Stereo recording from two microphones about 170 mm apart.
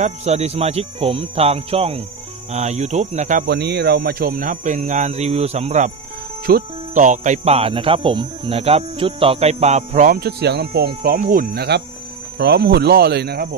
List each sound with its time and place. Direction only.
0.0 s speech: 40° right (ahead or behind)
3.4 s speech: 75° right (ahead or behind); by 5.9 s 40° right (ahead or behind)
6.4 s speech: 55° right (ahead or behind)
11.1 s speech: 55° right (ahead or behind)